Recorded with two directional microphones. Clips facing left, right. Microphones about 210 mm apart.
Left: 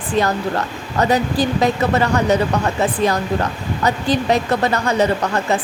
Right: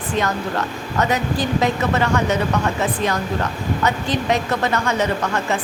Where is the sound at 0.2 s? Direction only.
35° left (ahead or behind).